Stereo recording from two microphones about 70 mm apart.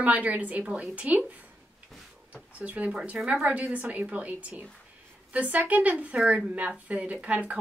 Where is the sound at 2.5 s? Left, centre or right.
Right.